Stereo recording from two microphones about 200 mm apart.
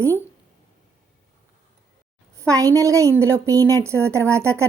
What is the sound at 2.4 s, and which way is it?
A woman's voice, 15° right (ahead or behind).